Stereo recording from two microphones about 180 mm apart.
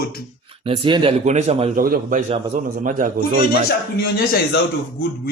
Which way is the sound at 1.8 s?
50° right (ahead or behind).